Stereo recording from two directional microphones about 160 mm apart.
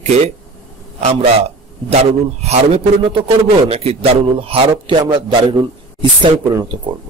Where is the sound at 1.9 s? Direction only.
40° right (ahead or behind).